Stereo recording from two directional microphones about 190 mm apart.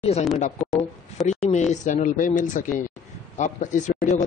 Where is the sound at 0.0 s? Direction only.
35° left (ahead or behind).